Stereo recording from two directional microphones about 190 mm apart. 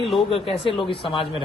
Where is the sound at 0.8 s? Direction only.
25° left (ahead or behind).